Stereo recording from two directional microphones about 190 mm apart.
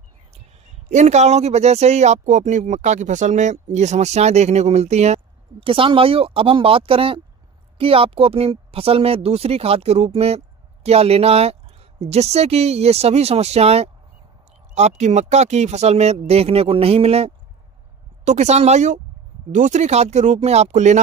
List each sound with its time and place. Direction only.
0.8 s speech: 35° right (ahead or behind)